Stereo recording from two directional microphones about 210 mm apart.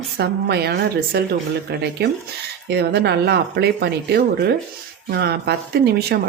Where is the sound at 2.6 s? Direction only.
50° right (ahead or behind).